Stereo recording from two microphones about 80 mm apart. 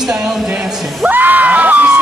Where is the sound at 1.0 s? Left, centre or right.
Right.